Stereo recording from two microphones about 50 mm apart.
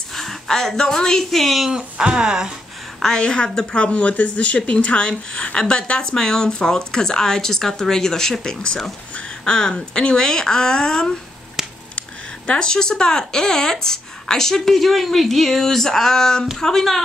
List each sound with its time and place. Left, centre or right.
0.1 s speech: centre
1.7 s speech: centre
3.0 s speech: centre
12.4 s speech: centre